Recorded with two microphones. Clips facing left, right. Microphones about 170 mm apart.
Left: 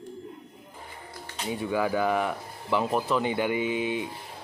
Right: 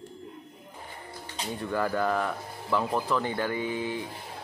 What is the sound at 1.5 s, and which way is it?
A man's voice, 5° left (ahead or behind).